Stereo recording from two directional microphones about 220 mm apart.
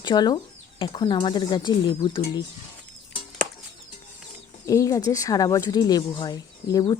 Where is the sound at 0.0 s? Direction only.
20° left (ahead or behind).